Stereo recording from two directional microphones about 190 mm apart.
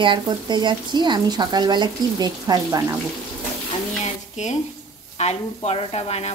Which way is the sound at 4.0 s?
40° left (ahead or behind).